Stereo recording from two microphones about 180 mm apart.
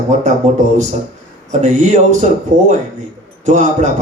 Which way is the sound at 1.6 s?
40° right (ahead or behind).